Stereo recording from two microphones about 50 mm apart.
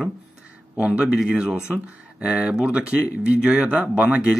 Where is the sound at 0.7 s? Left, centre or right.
Right.